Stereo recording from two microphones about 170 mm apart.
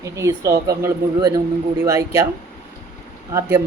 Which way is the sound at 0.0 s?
20° right (ahead or behind).